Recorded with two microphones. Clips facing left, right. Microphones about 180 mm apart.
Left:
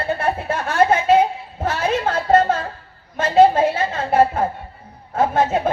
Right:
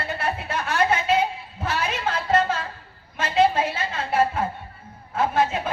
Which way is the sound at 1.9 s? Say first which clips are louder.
Left 8 dB; 50° left (ahead or behind).